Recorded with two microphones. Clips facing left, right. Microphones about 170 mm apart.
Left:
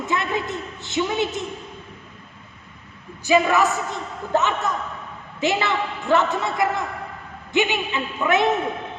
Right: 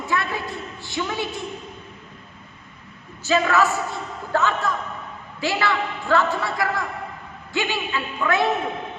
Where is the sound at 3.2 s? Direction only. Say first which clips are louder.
Left 2 dB; 15° left (ahead or behind).